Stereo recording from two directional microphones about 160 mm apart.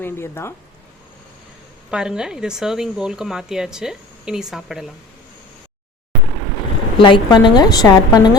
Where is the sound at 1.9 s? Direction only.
5° right (ahead or behind).